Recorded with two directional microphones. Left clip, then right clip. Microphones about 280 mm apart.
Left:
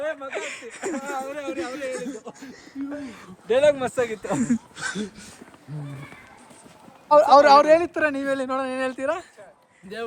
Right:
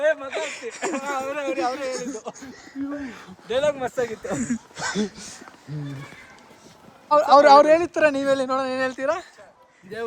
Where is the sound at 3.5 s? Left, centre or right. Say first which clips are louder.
Left 4 dB; left.